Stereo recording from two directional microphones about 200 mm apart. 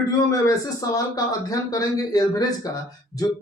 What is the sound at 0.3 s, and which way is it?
Speech, 15° left (ahead or behind).